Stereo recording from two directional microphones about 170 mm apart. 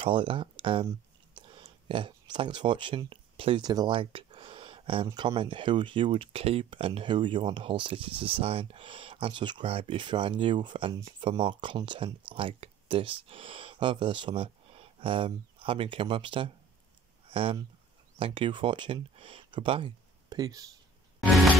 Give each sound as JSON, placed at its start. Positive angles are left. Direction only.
{"t": 0.0, "sound": "speech", "side_deg": -30}